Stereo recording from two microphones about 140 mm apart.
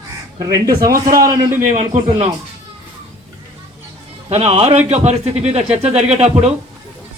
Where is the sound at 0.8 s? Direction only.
90° right.